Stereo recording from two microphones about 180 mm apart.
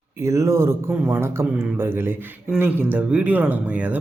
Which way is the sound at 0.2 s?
15° right (ahead or behind).